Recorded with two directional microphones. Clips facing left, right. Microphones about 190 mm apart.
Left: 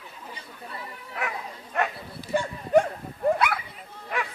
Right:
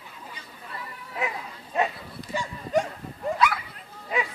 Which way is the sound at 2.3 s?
55° left (ahead or behind).